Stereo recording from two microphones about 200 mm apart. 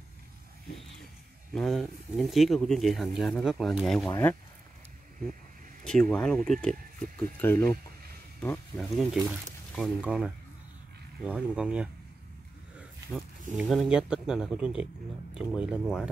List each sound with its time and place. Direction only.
1.5 s speech: centre (ahead or behind)
4.1 s speech: 10° left (ahead or behind)
5.9 s speech: 5° left (ahead or behind)
8.7 s speech: centre (ahead or behind)
13.1 s speech: 10° right (ahead or behind)